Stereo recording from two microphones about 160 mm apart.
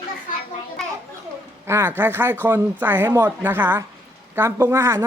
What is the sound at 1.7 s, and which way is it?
A woman's voice, 15° right (ahead or behind).